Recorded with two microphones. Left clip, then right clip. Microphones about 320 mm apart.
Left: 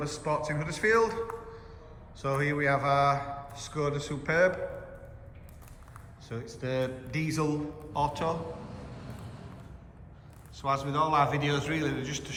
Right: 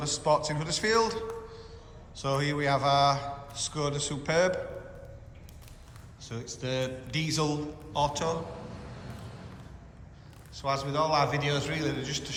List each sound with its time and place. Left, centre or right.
0.0 s a man's voice: centre
6.2 s a man's voice: centre
10.5 s a man's voice: centre